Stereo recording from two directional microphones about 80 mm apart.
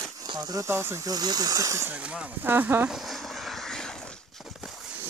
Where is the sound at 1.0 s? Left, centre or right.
Right.